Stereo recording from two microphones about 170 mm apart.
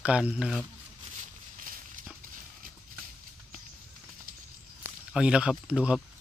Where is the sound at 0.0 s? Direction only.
5° right (ahead or behind).